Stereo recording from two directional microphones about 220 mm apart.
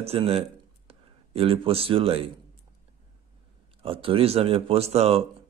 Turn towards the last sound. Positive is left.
turn(degrees=-30)  # may be behind; listen again after turning